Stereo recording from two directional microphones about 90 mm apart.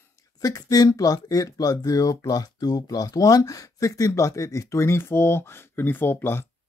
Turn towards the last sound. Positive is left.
turn(degrees=25)  # may be behind; listen again after turning